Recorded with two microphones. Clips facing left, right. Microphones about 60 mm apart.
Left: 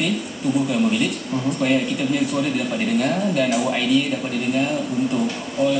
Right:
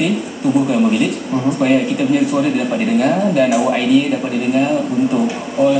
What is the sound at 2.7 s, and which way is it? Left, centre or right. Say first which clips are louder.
Speech: right 6 dB; centre.